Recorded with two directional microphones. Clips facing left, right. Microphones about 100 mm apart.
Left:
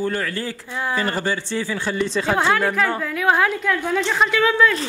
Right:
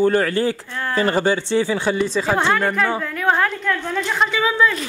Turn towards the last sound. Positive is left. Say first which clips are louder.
# left 1 dB
turn(degrees=0)  # may be behind; listen again after turning